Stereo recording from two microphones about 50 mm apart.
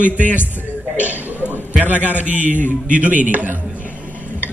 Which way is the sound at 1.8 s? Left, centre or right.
Right.